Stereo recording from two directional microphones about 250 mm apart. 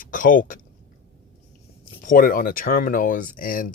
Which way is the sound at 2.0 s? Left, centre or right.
Left.